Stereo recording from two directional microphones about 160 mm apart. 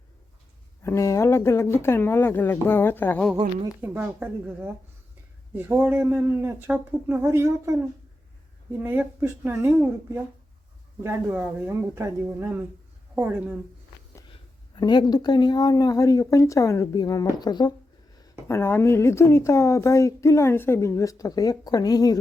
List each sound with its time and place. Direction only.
0.8 s speech: 15° left (ahead or behind)
3.8 s speech: 15° right (ahead or behind)
8.8 s speech: 10° right (ahead or behind)
14.8 s speech: 25° left (ahead or behind)
18.2 s speech: 15° left (ahead or behind)